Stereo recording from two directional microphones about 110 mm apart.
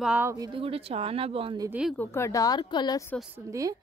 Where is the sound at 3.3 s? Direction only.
30° right (ahead or behind).